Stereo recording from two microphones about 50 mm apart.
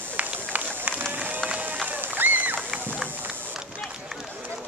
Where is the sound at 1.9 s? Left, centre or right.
Right.